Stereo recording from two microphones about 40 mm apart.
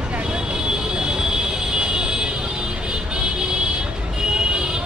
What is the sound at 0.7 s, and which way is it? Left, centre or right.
Vehicle, centre.